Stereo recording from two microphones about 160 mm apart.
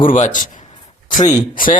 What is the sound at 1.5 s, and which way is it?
Speech, 60° left (ahead or behind).